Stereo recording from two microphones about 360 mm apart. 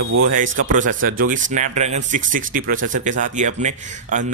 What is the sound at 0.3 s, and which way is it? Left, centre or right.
Speech, right.